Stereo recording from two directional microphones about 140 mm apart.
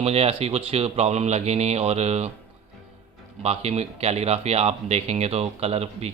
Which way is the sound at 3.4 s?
50° right (ahead or behind).